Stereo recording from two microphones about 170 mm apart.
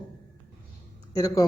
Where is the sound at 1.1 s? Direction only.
20° left (ahead or behind).